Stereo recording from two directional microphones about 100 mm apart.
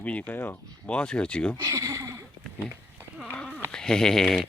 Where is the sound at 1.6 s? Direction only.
35° right (ahead or behind).